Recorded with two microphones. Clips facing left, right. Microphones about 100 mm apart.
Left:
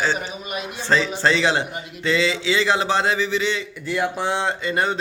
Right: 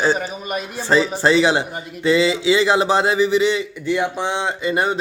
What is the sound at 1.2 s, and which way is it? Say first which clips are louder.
Speech: right 4 dB; 15° right (ahead or behind).